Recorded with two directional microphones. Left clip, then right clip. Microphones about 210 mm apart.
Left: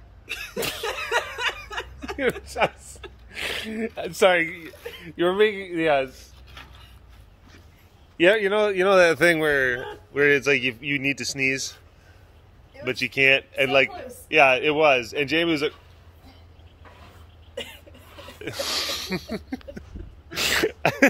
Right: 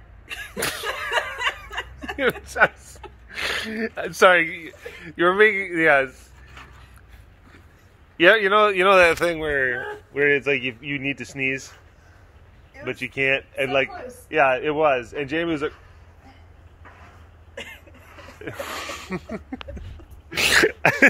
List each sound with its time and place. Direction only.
0.6 s chuckle: 10° right (ahead or behind)
1.7 s speech: 5° right (ahead or behind)
8.2 s speech: 10° left (ahead or behind)
8.9 s speech: 45° left (ahead or behind)
9.5 s speech: 20° left (ahead or behind)
12.8 s speech: 25° left (ahead or behind)
18.4 s speech: 15° left (ahead or behind)
20.2 s throat clearing: 10° right (ahead or behind)